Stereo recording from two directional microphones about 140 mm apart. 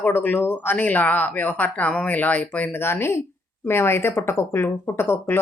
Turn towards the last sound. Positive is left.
turn(degrees=15)  # may be behind; listen again after turning